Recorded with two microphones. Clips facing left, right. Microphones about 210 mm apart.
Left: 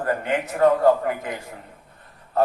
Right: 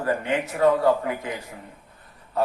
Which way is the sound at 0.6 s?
50° left (ahead or behind).